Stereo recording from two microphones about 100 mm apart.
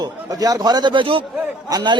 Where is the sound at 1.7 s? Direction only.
40° right (ahead or behind).